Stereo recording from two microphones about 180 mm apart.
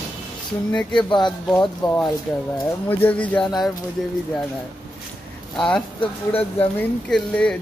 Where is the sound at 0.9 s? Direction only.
25° left (ahead or behind).